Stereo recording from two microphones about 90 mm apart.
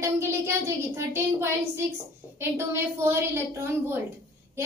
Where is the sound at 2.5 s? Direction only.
30° right (ahead or behind).